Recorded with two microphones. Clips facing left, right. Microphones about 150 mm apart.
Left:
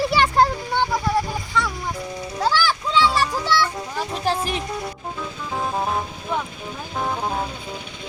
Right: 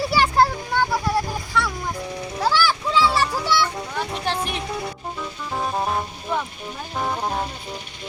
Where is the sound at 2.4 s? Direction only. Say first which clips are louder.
Even; 5° right (ahead or behind).